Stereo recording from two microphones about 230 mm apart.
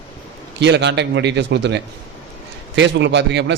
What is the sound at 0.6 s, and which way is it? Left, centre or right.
A man's voice, right.